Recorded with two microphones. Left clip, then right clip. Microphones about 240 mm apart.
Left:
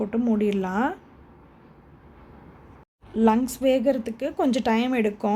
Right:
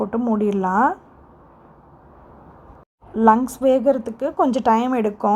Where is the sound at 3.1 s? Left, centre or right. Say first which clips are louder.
Right 6 dB; centre.